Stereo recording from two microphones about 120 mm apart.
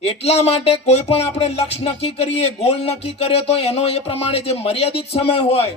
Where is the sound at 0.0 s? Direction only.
60° left (ahead or behind).